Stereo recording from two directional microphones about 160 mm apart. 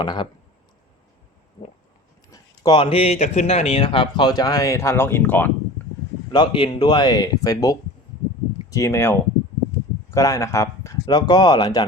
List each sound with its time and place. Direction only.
0.0 s speech: 30° left (ahead or behind)
2.3 s speech: 30° left (ahead or behind); by 5.5 s 10° left (ahead or behind)
6.3 s speech: 30° left (ahead or behind)